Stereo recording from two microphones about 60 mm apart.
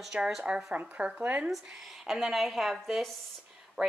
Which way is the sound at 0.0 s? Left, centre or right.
Centre.